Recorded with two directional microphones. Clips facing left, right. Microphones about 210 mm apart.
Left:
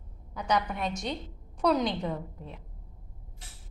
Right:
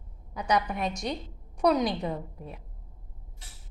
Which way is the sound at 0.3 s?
15° right (ahead or behind).